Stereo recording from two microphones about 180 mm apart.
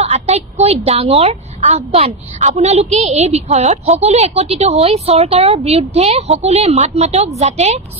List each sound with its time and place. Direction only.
0.0 s a woman's voice: 35° right (ahead or behind)